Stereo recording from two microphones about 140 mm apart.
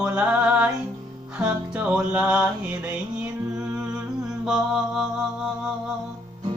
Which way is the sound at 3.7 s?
5° right (ahead or behind).